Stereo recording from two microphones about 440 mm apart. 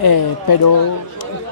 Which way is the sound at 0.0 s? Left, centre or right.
Left.